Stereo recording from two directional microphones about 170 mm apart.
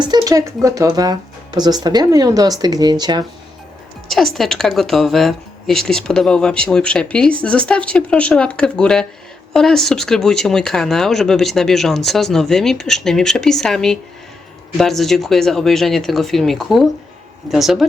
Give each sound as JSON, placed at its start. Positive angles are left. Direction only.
{"t": 0.0, "sound": "speech", "side_deg": -25}
{"t": 4.1, "sound": "a woman's voice", "side_deg": 0}